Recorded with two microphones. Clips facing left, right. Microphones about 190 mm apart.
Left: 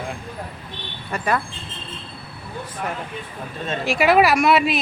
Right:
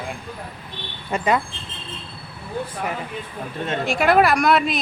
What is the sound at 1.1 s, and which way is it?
Speech, 20° right (ahead or behind).